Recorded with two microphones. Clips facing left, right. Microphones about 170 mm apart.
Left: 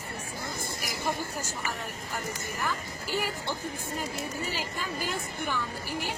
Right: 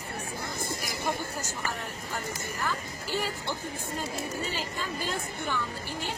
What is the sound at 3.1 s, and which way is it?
Speech, 15° left (ahead or behind).